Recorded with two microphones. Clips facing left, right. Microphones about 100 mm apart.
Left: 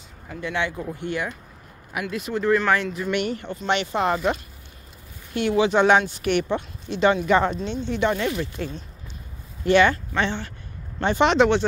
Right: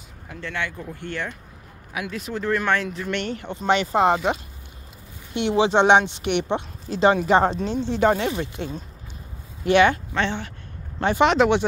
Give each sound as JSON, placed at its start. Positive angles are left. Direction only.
{"t": 0.4, "sound": "speech", "side_deg": 15}
{"t": 2.0, "sound": "speech", "side_deg": 0}
{"t": 3.6, "sound": "speech", "side_deg": -35}
{"t": 5.3, "sound": "a woman's voice", "side_deg": -25}
{"t": 8.6, "sound": "a woman's voice", "side_deg": -20}
{"t": 10.1, "sound": "speech", "side_deg": 0}